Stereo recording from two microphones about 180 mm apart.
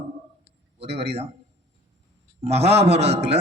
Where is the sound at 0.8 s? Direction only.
70° right (ahead or behind).